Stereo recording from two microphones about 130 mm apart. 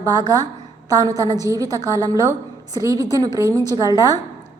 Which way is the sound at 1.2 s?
25° right (ahead or behind).